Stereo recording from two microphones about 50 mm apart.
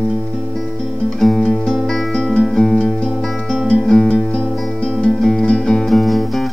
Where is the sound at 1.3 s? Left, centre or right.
Centre.